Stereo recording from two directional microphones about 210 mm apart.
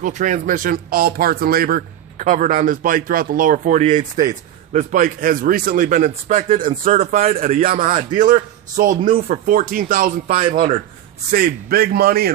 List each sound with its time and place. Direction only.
0.0 s a man's voice: 35° right (ahead or behind)